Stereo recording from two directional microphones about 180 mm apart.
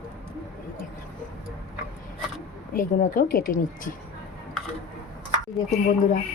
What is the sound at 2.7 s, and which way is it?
Speech, 50° left (ahead or behind).